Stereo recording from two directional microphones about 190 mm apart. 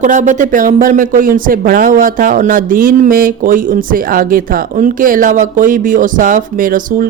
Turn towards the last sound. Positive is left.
turn(degrees=-45)  # may be behind; listen again after turning